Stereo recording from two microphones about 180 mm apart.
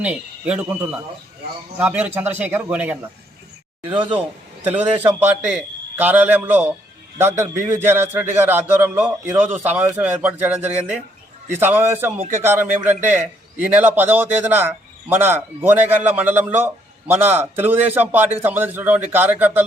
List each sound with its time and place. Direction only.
0.0 s a man's voice: 10° right (ahead or behind)
4.6 s a man's voice: 10° right (ahead or behind)